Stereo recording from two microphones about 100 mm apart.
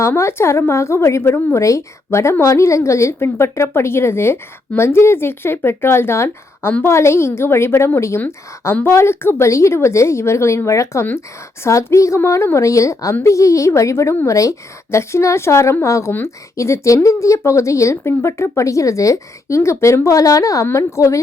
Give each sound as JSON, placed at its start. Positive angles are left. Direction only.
{"t": 0.0, "sound": "a woman's voice", "side_deg": 25}